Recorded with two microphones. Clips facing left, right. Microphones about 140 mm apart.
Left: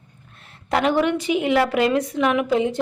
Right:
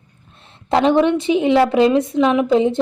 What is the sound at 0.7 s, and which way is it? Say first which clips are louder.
A woman's voice: right 5 dB; 25° right (ahead or behind).